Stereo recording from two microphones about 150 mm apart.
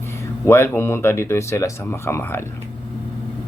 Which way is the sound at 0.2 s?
15° left (ahead or behind).